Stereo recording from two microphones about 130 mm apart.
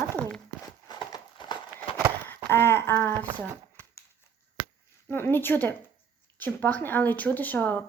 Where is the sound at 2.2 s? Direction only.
15° left (ahead or behind).